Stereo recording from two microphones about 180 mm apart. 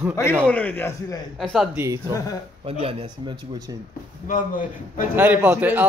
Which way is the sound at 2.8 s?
30° right (ahead or behind).